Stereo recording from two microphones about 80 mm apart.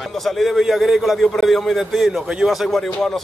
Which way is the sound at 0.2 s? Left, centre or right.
Centre.